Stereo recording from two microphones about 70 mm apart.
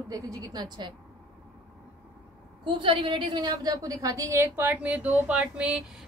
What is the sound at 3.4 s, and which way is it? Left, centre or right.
A woman's voice, right.